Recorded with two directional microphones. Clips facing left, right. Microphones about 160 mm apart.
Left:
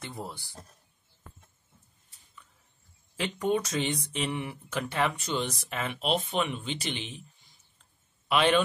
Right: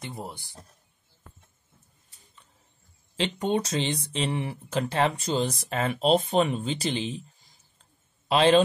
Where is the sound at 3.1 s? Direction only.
25° right (ahead or behind).